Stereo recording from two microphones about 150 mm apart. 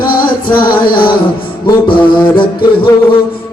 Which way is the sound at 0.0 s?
75° left (ahead or behind).